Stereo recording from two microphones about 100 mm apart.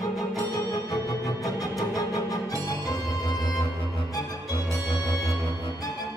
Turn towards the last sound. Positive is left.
turn(degrees=50)  # may be behind; listen again after turning